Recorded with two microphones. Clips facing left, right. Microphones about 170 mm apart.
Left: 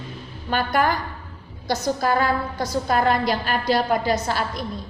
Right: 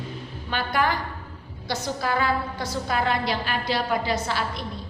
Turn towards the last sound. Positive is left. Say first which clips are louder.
# left 3 dB
turn(degrees=45)  # may be behind; listen again after turning